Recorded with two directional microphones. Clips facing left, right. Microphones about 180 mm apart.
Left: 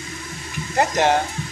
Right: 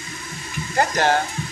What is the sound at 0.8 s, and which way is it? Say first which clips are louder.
Speech: left 1 dB; 20° left (ahead or behind).